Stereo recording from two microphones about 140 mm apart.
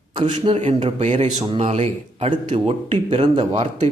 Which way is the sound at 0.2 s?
40° right (ahead or behind).